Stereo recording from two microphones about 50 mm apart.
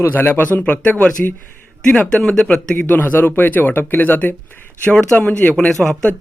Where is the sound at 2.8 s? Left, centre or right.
Left.